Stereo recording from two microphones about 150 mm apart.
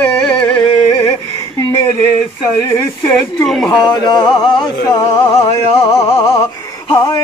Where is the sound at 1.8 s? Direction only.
15° left (ahead or behind).